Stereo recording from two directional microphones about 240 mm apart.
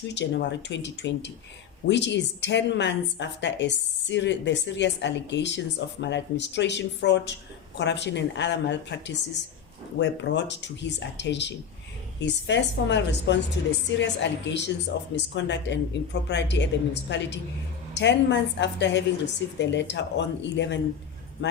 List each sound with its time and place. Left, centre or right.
0.7 s a woman's voice: left